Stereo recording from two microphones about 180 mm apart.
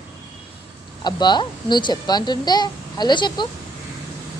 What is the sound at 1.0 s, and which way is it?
Speech, 25° left (ahead or behind).